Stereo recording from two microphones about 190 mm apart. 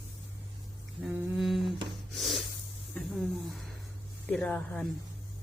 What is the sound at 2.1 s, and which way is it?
Snort, centre (ahead or behind).